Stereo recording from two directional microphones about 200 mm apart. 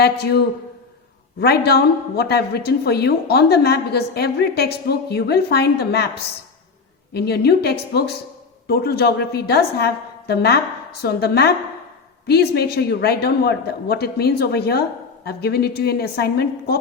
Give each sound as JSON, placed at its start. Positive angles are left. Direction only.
{"t": 0.0, "sound": "a woman's voice", "side_deg": 55}
{"t": 7.1, "sound": "a woman's voice", "side_deg": 55}